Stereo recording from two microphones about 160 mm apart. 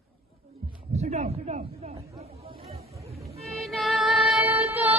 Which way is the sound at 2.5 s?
70° right (ahead or behind).